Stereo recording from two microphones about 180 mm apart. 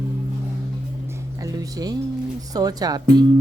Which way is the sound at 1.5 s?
20° right (ahead or behind).